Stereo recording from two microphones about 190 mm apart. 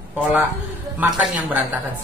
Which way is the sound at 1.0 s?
5° right (ahead or behind).